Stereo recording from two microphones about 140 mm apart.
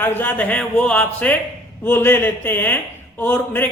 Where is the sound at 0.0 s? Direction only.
15° left (ahead or behind).